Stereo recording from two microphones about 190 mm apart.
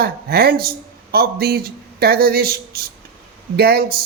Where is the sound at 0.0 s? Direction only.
55° right (ahead or behind).